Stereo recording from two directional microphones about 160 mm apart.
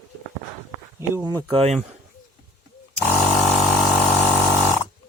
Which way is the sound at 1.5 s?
40° right (ahead or behind).